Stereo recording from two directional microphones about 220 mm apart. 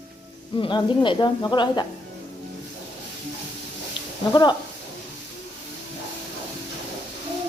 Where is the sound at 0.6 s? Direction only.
20° left (ahead or behind).